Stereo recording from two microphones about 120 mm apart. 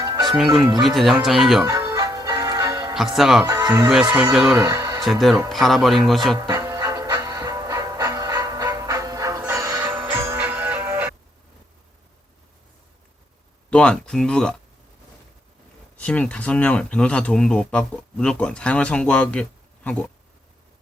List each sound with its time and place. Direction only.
0.0 s music: 35° right (ahead or behind)
0.3 s speech: centre (ahead or behind)
1.6 s music: 30° right (ahead or behind)
2.9 s speech: centre (ahead or behind)
3.4 s music: 30° right (ahead or behind)
3.8 s speech: 5° right (ahead or behind)
4.6 s music: 25° right (ahead or behind)
5.5 s speech: centre (ahead or behind)
6.5 s music: 30° right (ahead or behind)
9.9 s music: 15° right (ahead or behind)
13.7 s speech: 10° left (ahead or behind)
16.0 s speech: 10° left (ahead or behind)